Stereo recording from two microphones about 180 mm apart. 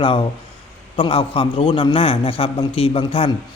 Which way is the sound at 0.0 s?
30° left (ahead or behind).